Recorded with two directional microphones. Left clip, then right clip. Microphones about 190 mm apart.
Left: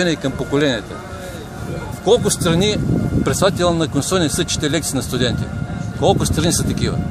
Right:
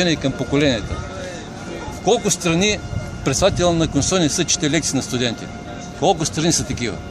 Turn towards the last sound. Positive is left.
turn(degrees=10)  # may be behind; listen again after turning